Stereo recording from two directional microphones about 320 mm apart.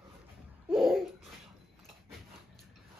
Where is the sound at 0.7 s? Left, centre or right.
Centre.